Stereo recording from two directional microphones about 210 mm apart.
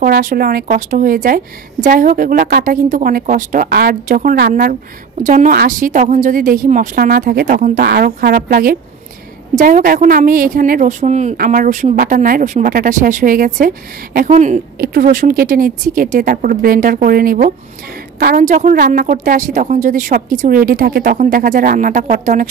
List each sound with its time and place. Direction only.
0.0 s a woman's voice: 40° right (ahead or behind)